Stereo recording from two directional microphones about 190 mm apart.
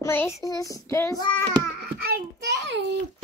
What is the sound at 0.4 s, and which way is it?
Child singing, 20° left (ahead or behind).